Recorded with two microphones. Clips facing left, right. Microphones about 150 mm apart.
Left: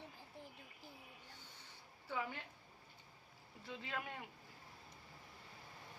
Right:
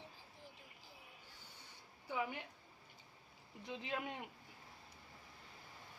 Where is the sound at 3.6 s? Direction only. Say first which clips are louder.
Right 3 dB; 20° right (ahead or behind).